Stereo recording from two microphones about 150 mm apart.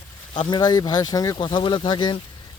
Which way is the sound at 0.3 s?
30° left (ahead or behind).